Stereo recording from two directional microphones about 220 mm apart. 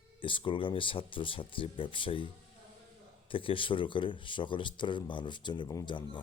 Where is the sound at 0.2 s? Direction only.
25° left (ahead or behind).